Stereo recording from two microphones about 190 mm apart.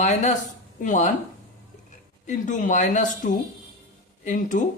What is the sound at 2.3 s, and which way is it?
Speech, 40° left (ahead or behind).